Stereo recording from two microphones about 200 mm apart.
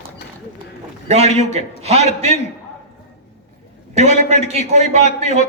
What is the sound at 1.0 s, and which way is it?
A man's voice, 35° right (ahead or behind).